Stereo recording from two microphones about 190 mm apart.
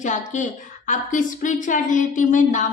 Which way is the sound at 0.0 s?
40° left (ahead or behind).